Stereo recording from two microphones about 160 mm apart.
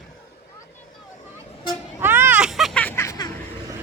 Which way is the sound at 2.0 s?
15° right (ahead or behind).